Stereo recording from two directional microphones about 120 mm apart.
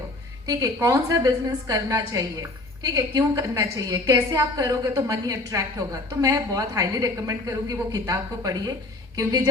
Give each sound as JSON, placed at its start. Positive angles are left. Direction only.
{"t": 0.4, "sound": "a woman's voice", "side_deg": -30}